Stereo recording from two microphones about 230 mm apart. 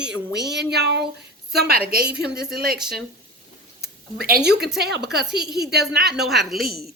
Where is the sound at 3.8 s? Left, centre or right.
Right.